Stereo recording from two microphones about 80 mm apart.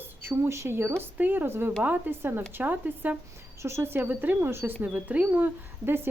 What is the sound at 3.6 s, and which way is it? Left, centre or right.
Speech, right.